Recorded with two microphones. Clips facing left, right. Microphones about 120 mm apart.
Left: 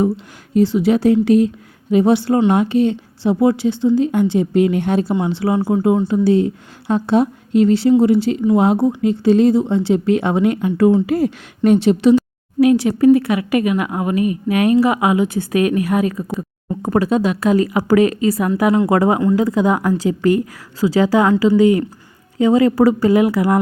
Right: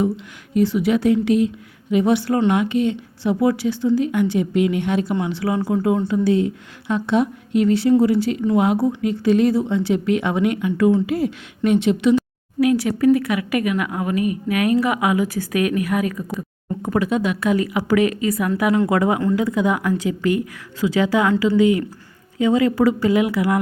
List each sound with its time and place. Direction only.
0.5 s speech: 30° left (ahead or behind)